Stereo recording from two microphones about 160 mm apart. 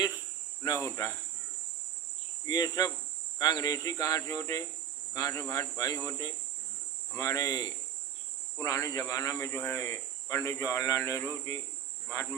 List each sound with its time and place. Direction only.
0.6 s cricket: 20° left (ahead or behind)
2.5 s speech: 25° left (ahead or behind)
12.1 s cricket: 15° left (ahead or behind)